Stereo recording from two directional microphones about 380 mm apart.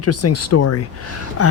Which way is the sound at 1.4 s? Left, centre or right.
Left.